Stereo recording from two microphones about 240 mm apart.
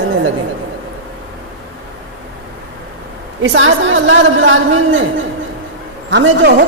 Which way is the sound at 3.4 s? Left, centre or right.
Right.